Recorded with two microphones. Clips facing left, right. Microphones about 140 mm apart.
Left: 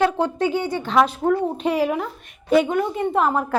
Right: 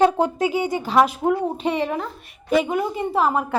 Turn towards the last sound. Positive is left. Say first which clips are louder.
# left 1 dB
turn(degrees=-5)  # may be behind; listen again after turning